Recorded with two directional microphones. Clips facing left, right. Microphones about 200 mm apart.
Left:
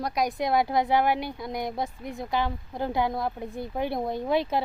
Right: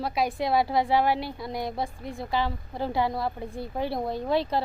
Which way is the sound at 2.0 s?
20° left (ahead or behind).